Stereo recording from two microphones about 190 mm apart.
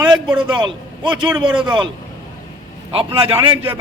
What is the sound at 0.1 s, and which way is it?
A man's voice, 25° right (ahead or behind).